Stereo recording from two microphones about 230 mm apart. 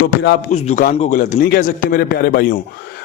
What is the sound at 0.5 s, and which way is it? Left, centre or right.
A man's voice, left.